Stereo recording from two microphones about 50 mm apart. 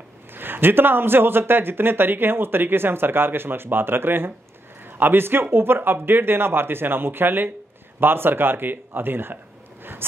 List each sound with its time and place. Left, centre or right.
0.3 s speech: right